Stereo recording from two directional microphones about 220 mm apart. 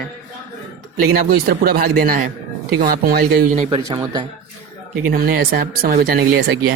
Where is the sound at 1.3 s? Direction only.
40° right (ahead or behind).